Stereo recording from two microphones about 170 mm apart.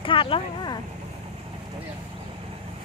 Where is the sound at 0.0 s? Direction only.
30° left (ahead or behind).